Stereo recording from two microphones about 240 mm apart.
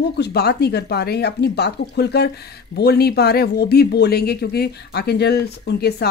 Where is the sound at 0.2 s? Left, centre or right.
Left.